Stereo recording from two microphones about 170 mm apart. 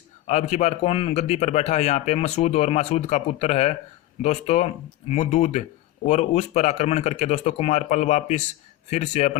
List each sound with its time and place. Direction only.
0.3 s speech: 45° left (ahead or behind)